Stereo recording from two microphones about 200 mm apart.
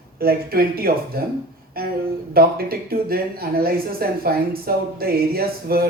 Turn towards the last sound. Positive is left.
turn(degrees=-50)  # may be behind; listen again after turning